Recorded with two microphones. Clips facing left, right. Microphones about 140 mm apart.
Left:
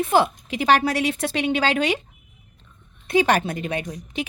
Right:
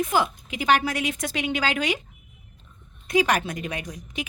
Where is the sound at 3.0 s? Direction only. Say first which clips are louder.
Left 3 dB; 30° left (ahead or behind).